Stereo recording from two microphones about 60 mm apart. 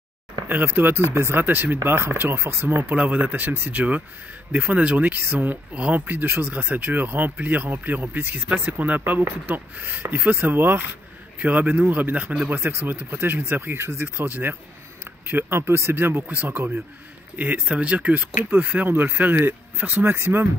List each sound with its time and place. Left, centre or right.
0.5 s speech: right
1.4 s speech: right
1.8 s speech: right
2.9 s speech: right
12.5 s speech: right
13.4 s speech: right
14.0 s speech: right
17.6 s speech: centre; by 20.4 s right